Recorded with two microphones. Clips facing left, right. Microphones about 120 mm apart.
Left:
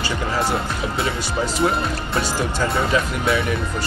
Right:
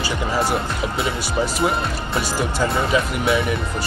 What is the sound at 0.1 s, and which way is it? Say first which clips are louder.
Speech: right 1 dB; 10° right (ahead or behind).